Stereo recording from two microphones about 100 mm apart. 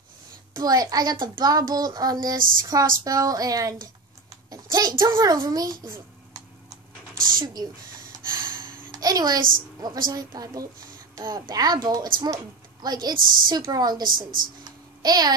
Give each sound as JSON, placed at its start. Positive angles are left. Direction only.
{"t": 0.6, "sound": "a woman's voice", "side_deg": -40}
{"t": 8.9, "sound": "a woman's voice", "side_deg": -40}